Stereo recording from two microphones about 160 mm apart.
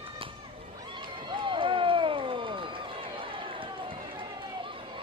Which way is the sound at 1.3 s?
30° right (ahead or behind).